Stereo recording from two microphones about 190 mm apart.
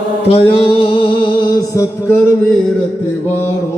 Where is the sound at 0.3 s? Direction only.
30° left (ahead or behind).